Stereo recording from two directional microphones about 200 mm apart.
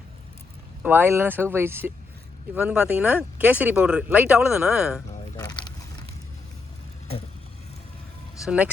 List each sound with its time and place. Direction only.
0.8 s speech: 10° right (ahead or behind)
5.4 s vehicle: 20° left (ahead or behind)
8.4 s speech: 5° right (ahead or behind)